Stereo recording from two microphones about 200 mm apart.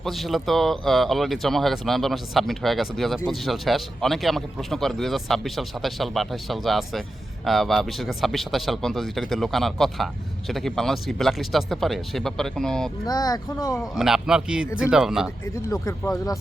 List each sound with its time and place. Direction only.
0.0 s a man's voice: centre (ahead or behind)
13.1 s speech: 20° left (ahead or behind)
13.8 s a man's voice: centre (ahead or behind)
15.5 s speech: 15° left (ahead or behind)